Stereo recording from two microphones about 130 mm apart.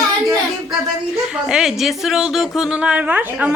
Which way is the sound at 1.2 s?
5° right (ahead or behind).